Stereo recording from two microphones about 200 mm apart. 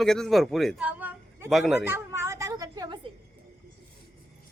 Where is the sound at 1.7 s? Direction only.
10° right (ahead or behind).